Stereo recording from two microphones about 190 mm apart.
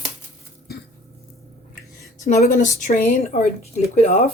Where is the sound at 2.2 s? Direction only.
40° left (ahead or behind).